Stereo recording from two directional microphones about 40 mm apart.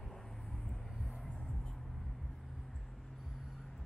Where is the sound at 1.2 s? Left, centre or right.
Left.